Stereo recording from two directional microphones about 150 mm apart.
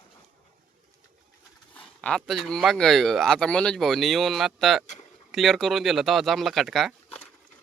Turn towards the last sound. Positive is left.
turn(degrees=0)  # may be behind; listen again after turning